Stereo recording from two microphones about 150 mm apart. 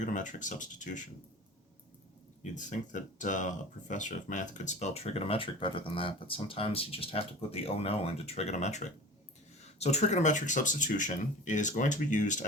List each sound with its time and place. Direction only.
0.0 s speech: 55° left (ahead or behind)
2.4 s speech: 55° left (ahead or behind)